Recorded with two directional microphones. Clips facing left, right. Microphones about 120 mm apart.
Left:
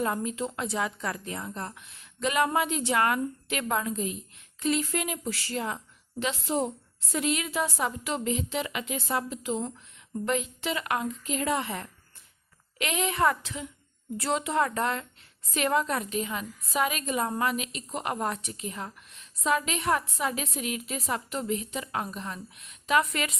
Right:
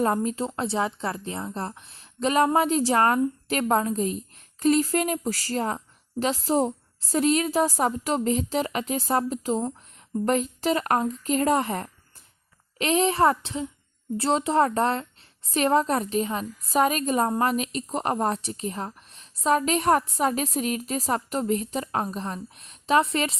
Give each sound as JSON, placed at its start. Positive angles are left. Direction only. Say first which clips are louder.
{"t": 0.0, "sound": "a woman's voice", "louder": "right 5 dB", "side_deg": -40}